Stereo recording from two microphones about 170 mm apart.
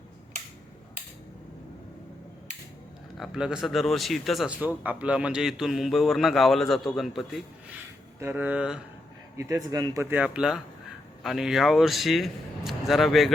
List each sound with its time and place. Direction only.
3.2 s a man's voice: 5° right (ahead or behind)
9.4 s a man's voice: 20° right (ahead or behind); by 13.3 s centre (ahead or behind)